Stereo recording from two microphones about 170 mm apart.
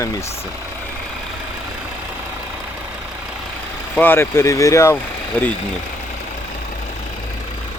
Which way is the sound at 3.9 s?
10° left (ahead or behind).